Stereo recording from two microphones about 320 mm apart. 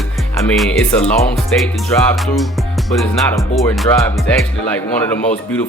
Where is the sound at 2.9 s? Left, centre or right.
Centre.